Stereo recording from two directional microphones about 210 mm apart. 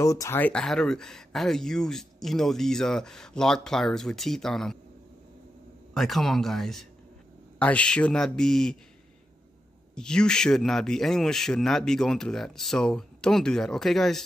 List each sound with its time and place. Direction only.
0.0 s speech: 15° left (ahead or behind)
5.9 s speech: centre (ahead or behind)
9.9 s speech: 5° left (ahead or behind)